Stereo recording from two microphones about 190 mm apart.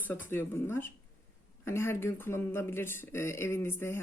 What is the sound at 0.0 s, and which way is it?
Speech, 10° left (ahead or behind).